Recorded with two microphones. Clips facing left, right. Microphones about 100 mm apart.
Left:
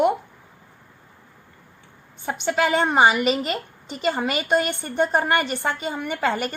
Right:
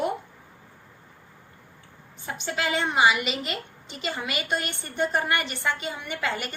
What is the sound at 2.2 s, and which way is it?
A woman's voice, 60° left (ahead or behind).